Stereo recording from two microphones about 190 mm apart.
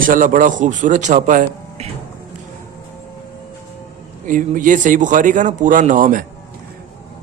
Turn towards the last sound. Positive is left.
turn(degrees=-45)  # may be behind; listen again after turning